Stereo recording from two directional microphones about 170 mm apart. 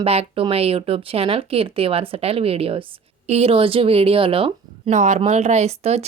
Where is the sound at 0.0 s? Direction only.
35° right (ahead or behind).